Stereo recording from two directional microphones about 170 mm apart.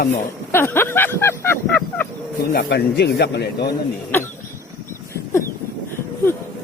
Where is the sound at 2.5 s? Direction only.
80° left.